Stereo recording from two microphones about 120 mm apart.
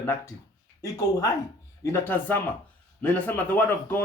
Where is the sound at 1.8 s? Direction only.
20° left (ahead or behind).